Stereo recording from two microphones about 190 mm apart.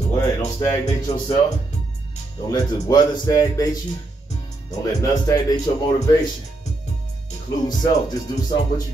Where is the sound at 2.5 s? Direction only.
20° left (ahead or behind).